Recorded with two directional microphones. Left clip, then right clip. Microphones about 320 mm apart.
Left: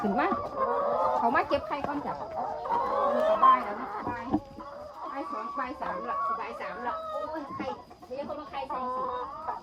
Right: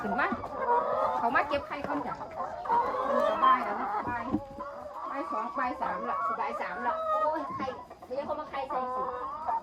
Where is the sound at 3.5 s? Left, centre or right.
Centre.